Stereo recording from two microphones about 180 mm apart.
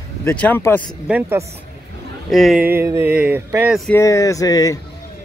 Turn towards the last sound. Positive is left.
turn(degrees=20)  # may be behind; listen again after turning